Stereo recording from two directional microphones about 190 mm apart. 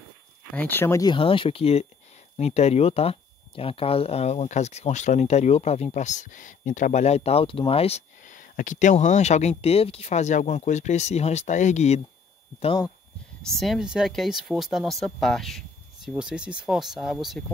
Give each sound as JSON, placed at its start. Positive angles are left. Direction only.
{"t": 0.6, "sound": "speech", "side_deg": 10}
{"t": 13.5, "sound": "speech", "side_deg": 0}